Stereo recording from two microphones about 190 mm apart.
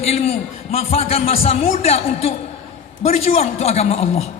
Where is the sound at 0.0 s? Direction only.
35° left (ahead or behind).